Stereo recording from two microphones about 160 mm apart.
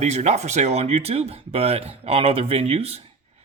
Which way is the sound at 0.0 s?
45° right (ahead or behind).